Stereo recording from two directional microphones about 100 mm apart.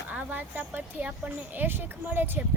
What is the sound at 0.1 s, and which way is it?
Speech, 15° right (ahead or behind).